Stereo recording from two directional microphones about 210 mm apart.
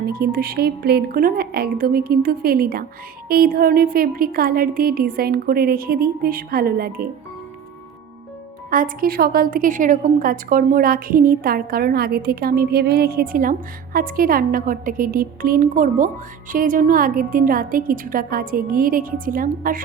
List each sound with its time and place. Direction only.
0.0 s a woman's voice: 45° right (ahead or behind)
8.7 s a woman's voice: 45° right (ahead or behind)